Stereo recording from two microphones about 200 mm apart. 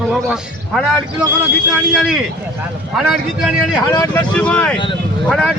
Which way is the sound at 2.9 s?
Centre (ahead or behind).